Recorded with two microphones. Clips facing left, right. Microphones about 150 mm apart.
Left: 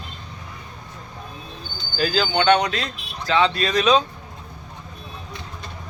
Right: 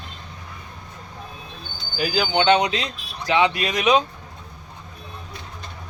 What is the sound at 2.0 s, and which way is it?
Speech, 15° right (ahead or behind).